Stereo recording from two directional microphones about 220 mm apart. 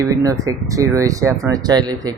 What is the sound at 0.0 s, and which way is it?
Speech, 15° right (ahead or behind).